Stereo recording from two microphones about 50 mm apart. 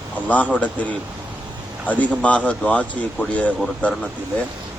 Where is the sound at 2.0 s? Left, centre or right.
Left.